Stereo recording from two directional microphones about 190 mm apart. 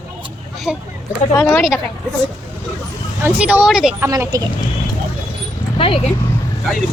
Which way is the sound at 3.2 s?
10° right (ahead or behind).